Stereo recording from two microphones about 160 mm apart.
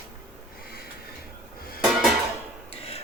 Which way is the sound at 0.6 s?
75° left (ahead or behind).